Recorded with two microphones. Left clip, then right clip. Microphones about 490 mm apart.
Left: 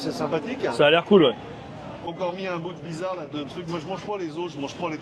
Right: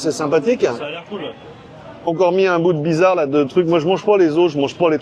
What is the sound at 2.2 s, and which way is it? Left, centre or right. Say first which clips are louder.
A man's voice: right 15 dB; right.